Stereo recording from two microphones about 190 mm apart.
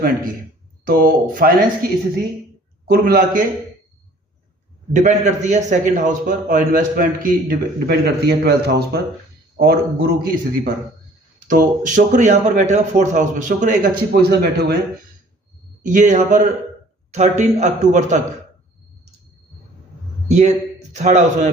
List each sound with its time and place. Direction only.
0.9 s a man's voice: 50° right (ahead or behind)
4.9 s a man's voice: 40° right (ahead or behind); by 10.7 s 55° right (ahead or behind)
11.4 s speech: 45° right (ahead or behind)
14.1 s a man's voice: 55° right (ahead or behind)
15.9 s speech: 40° right (ahead or behind)
20.3 s a man's voice: 35° right (ahead or behind)